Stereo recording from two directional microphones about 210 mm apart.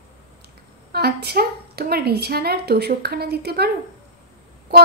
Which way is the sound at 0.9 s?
50° right (ahead or behind).